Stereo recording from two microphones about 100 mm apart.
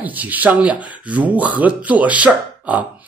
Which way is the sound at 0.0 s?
15° right (ahead or behind).